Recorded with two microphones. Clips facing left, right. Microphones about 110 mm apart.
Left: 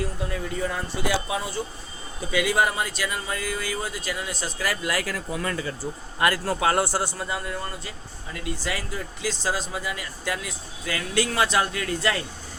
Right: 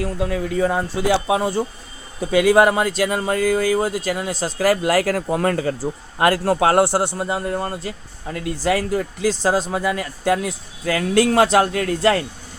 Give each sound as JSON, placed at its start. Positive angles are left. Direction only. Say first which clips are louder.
{"t": 0.0, "sound": "speech", "louder": "right 7 dB", "side_deg": -90}
{"t": 3.2, "sound": "speech", "louder": "right 10 dB", "side_deg": -55}
{"t": 3.4, "sound": "speech", "louder": "right 12 dB", "side_deg": -90}
{"t": 3.8, "sound": "speech", "louder": "right 9 dB", "side_deg": -40}
{"t": 4.3, "sound": "speech", "louder": "right 13 dB", "side_deg": -35}
{"t": 5.3, "sound": "speech", "louder": "right 8 dB", "side_deg": -55}
{"t": 5.8, "sound": "speech", "louder": "right 4 dB", "side_deg": -35}
{"t": 6.7, "sound": "a man's voice", "louder": "right 8 dB", "side_deg": -25}
{"t": 7.4, "sound": "speech", "louder": "right 8 dB", "side_deg": -45}
{"t": 7.9, "sound": "speech", "louder": "right 8 dB", "side_deg": -55}